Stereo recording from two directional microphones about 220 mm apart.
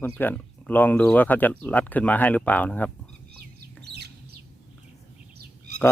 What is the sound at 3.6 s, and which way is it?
Chicken, 50° right (ahead or behind).